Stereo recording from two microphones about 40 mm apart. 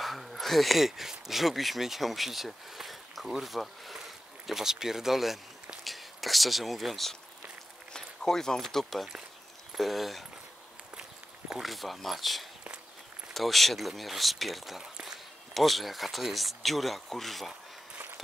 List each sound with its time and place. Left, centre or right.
0.0 s speech: centre
7.9 s a sound: centre
8.7 s speech: centre
11.0 s walk: right
11.6 s speech: centre
14.8 s a sound: centre
15.5 s speech: centre